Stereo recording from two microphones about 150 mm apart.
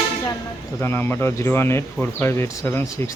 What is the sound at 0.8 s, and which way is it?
Speech, 15° left (ahead or behind).